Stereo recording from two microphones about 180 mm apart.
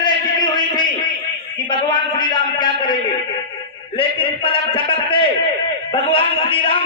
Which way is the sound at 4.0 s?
30° left (ahead or behind).